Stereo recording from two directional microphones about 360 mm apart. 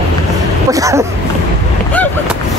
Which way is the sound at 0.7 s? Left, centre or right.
Centre.